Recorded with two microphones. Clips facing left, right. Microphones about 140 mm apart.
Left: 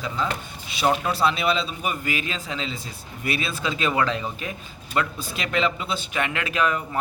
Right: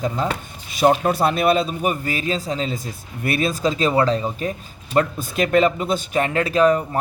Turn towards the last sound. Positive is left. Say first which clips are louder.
# right 8 dB
turn(degrees=-35)  # may be behind; listen again after turning